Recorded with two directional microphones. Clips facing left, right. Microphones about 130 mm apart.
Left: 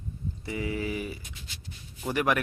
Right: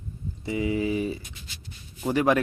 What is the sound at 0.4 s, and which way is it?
Speech, 20° right (ahead or behind).